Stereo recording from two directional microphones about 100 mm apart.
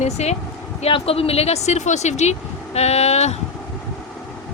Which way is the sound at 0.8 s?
70° left (ahead or behind).